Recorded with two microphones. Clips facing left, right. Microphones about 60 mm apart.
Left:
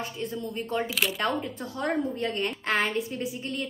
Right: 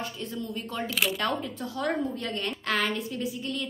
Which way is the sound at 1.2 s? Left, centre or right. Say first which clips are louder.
Left 1 dB; left.